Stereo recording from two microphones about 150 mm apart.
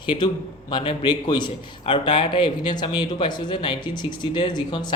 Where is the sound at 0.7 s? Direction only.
30° left (ahead or behind).